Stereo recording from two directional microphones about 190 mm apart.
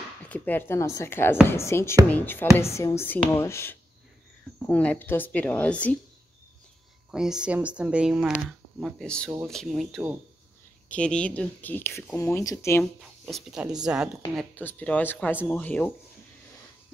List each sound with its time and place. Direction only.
0.2 s speech: 10° left (ahead or behind)
7.1 s speech: 5° right (ahead or behind); by 12.8 s 15° left (ahead or behind)
13.2 s speech: centre (ahead or behind)